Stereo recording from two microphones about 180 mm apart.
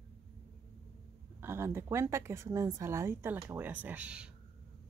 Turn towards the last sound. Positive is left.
turn(degrees=-5)  # may be behind; listen again after turning